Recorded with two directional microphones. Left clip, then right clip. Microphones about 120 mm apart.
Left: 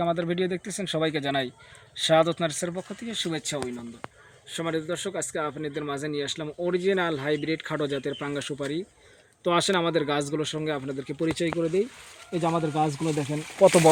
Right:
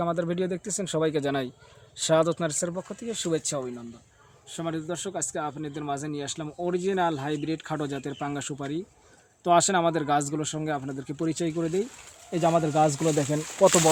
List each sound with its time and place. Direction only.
0.0 s speech: 25° right (ahead or behind)
4.6 s speech: 25° right (ahead or behind); by 13.2 s 45° right (ahead or behind)
13.6 s speech: 5° left (ahead or behind)